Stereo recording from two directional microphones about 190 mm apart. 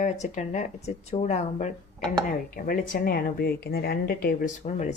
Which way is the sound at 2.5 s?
45° left (ahead or behind).